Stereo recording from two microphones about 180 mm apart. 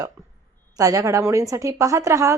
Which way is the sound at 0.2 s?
15° right (ahead or behind).